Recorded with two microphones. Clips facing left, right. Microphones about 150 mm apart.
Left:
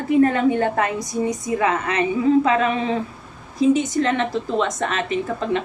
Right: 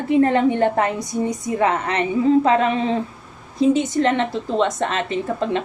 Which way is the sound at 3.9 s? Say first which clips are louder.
Right 1 dB; 30° right (ahead or behind).